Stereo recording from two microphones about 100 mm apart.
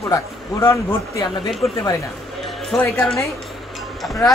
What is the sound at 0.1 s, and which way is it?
A man's voice, 30° left (ahead or behind).